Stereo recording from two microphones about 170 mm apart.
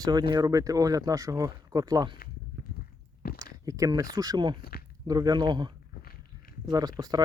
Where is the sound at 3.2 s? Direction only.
65° left (ahead or behind).